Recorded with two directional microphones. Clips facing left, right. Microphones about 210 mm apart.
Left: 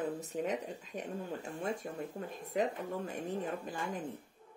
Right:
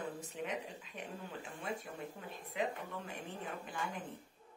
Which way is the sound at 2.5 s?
45° left (ahead or behind).